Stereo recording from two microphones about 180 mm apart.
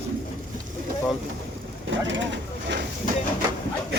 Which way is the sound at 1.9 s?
90° right.